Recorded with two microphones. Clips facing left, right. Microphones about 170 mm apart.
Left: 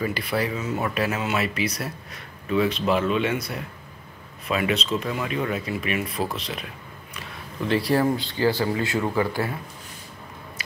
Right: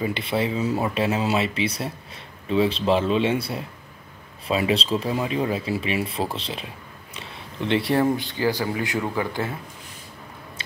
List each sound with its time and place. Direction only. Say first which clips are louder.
0.0 s speech: right 1 dB; 25° right (ahead or behind)